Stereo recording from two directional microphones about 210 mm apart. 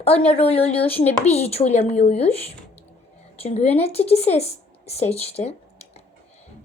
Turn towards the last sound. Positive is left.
turn(degrees=30)  # may be behind; listen again after turning